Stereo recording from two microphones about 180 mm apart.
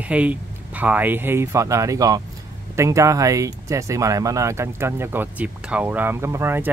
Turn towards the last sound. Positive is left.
turn(degrees=-15)  # may be behind; listen again after turning